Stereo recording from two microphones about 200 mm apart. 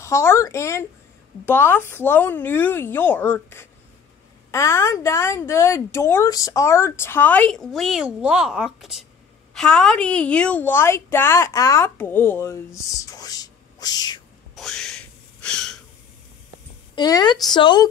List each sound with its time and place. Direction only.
0.0 s a woman's voice: 15° left (ahead or behind)
14.5 s a sound: centre (ahead or behind)
16.9 s a woman's voice: 20° left (ahead or behind)